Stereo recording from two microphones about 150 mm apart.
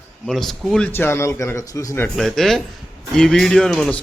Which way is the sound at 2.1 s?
Centre (ahead or behind).